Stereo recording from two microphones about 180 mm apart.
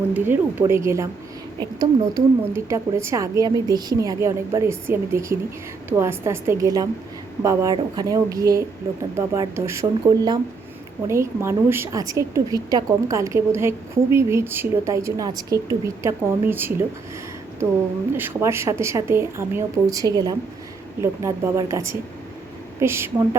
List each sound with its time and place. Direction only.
0.1 s a woman's voice: 10° right (ahead or behind)
18.1 s a woman's voice: 15° right (ahead or behind)